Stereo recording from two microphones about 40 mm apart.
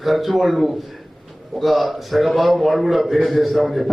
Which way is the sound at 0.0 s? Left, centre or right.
Centre.